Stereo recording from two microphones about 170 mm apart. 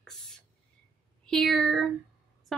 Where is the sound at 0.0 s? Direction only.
5° left (ahead or behind).